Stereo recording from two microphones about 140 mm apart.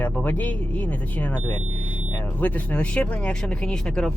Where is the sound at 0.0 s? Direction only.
10° left (ahead or behind).